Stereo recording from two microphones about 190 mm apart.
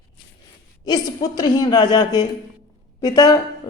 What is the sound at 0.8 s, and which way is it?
A woman's voice, 20° left (ahead or behind).